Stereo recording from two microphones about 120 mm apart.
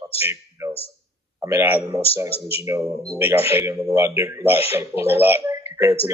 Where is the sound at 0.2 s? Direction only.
20° right (ahead or behind).